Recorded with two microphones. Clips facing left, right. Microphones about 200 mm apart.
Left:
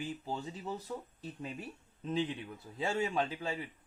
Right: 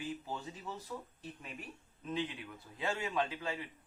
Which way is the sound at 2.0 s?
30° left (ahead or behind).